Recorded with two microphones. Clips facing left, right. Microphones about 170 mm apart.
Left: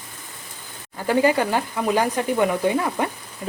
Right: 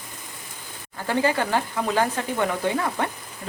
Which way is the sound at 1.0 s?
15° left (ahead or behind).